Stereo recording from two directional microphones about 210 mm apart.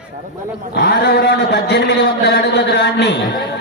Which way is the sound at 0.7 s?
50° left (ahead or behind).